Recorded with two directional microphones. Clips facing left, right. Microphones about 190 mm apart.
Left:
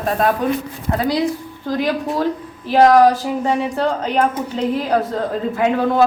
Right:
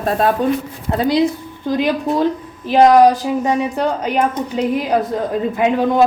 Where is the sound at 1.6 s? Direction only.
20° right (ahead or behind).